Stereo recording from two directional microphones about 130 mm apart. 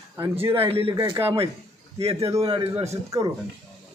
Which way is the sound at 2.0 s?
50° right (ahead or behind).